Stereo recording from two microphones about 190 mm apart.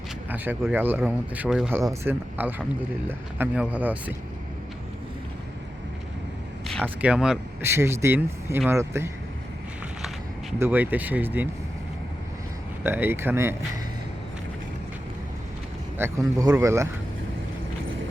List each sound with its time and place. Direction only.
0.3 s speech: 10° right (ahead or behind)
1.8 s speech: 15° right (ahead or behind)
6.8 s speech: 5° right (ahead or behind)
10.6 s speech: 10° right (ahead or behind)
12.8 s speech: 10° right (ahead or behind)
16.0 s speech: 15° right (ahead or behind)